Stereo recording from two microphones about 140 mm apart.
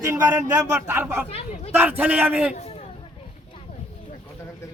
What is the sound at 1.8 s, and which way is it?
Speech, 10° right (ahead or behind).